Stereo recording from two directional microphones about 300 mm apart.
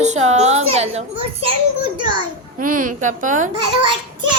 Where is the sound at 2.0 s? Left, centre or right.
Right.